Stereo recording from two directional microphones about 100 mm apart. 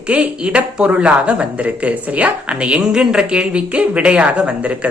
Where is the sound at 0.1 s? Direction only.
10° right (ahead or behind).